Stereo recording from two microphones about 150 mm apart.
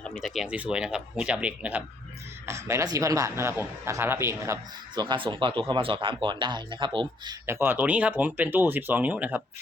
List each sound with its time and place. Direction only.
0.0 s speech: centre (ahead or behind)
2.5 s a man's voice: 20° right (ahead or behind)
4.9 s speech: 30° right (ahead or behind)
7.4 s speech: 15° right (ahead or behind)